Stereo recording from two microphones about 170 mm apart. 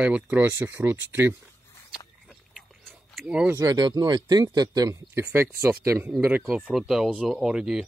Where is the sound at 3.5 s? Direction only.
25° right (ahead or behind).